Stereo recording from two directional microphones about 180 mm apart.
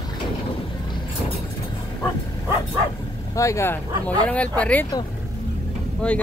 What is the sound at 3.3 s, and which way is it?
Speech, 15° left (ahead or behind).